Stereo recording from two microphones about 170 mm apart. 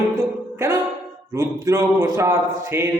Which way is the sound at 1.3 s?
20° right (ahead or behind).